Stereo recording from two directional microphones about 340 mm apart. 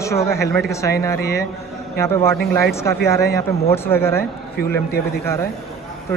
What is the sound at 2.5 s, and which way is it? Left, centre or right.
A man's voice, centre.